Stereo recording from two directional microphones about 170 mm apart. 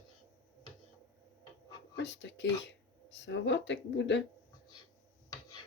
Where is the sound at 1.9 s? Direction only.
90° left.